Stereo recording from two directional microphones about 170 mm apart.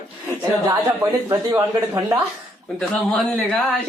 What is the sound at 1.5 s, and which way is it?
Speech, 10° right (ahead or behind).